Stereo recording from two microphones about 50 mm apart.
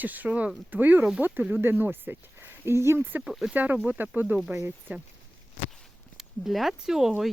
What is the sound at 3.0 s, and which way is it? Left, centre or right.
Speech, right.